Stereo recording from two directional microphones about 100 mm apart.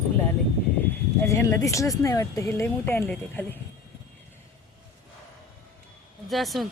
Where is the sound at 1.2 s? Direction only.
30° left (ahead or behind).